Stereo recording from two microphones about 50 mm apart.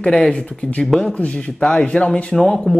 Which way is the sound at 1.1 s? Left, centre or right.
Left.